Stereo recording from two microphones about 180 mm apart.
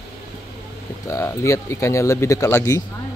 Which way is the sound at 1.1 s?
15° left (ahead or behind).